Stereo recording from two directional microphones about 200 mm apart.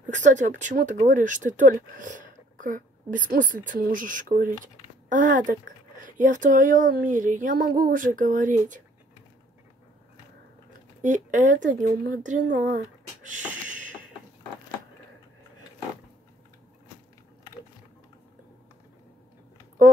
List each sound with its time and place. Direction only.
0.0 s speech: 40° right (ahead or behind)
11.0 s speech: 40° right (ahead or behind)
13.2 s a sound: 40° right (ahead or behind)